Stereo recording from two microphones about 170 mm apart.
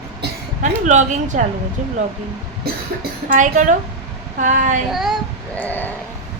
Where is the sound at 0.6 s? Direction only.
45° right (ahead or behind).